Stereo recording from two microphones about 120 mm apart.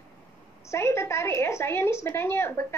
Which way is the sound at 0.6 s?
20° left (ahead or behind).